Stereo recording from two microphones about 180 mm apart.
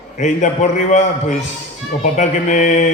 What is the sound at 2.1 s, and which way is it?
Mantra, 45° left (ahead or behind).